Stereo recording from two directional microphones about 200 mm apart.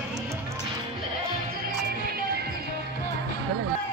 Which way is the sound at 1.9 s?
50° right (ahead or behind).